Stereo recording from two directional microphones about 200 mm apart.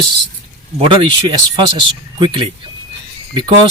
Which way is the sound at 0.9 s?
25° right (ahead or behind).